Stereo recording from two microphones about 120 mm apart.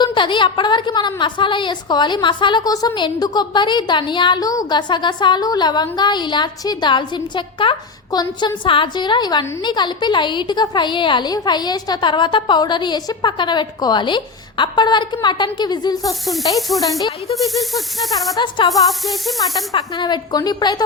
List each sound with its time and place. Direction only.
0.0 s a woman's voice: 40° left (ahead or behind)
16.6 s snake: centre (ahead or behind)
18.3 s a woman's voice: 40° left (ahead or behind)
18.7 s snake: centre (ahead or behind)
19.7 s a woman's voice: 40° left (ahead or behind)